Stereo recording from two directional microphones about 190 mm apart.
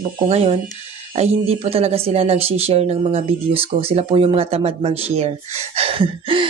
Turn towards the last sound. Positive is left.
turn(degrees=-30)  # may be behind; listen again after turning